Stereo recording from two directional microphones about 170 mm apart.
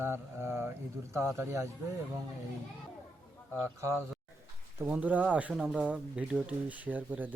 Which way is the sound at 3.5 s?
15° right (ahead or behind).